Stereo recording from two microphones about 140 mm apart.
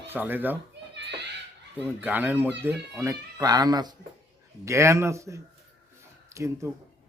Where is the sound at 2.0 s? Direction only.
10° right (ahead or behind).